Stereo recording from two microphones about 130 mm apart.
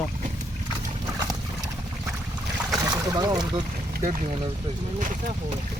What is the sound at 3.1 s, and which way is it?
Speech, 30° right (ahead or behind).